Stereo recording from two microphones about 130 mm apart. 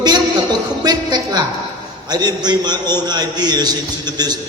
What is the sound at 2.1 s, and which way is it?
A man's voice, 30° right (ahead or behind).